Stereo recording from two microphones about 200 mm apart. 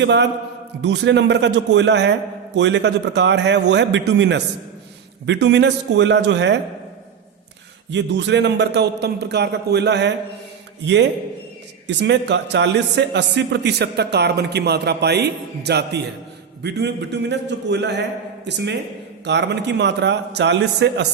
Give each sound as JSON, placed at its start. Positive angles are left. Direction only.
{"t": 0.0, "sound": "a man's voice", "side_deg": -60}
{"t": 7.9, "sound": "a man's voice", "side_deg": -60}